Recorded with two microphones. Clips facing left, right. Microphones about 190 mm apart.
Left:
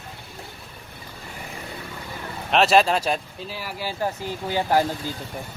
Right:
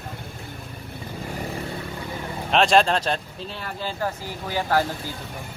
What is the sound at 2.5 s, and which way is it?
Speech, 5° left (ahead or behind).